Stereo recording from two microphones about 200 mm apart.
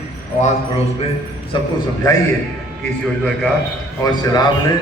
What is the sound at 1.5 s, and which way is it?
Speech, 25° left (ahead or behind).